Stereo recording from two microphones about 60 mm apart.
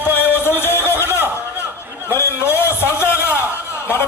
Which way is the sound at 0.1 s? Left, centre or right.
Left.